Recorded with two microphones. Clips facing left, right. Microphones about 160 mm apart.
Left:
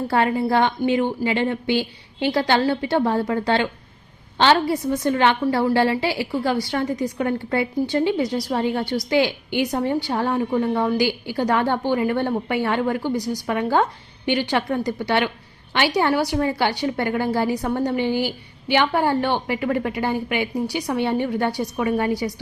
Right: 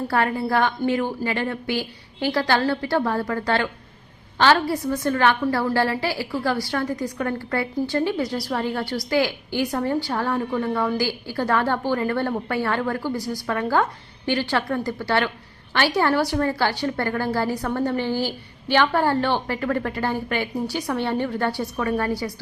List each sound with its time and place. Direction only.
0.1 s a woman's voice: 20° left (ahead or behind)